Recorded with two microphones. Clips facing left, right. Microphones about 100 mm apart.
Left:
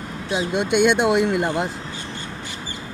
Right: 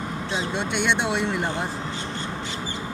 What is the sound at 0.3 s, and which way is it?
Speech, 15° left (ahead or behind).